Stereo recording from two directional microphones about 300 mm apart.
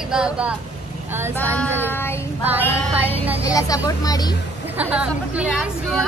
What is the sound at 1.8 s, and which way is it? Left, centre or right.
Child singing, centre.